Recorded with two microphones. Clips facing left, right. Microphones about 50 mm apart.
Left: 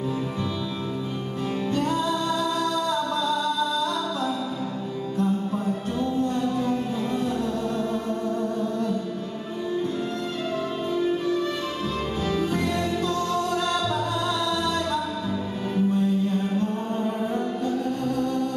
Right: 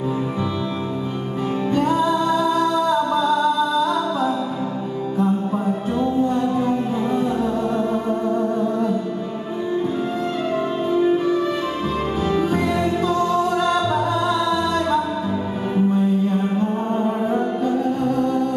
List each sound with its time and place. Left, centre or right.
1.7 s music: centre
10.9 s music: centre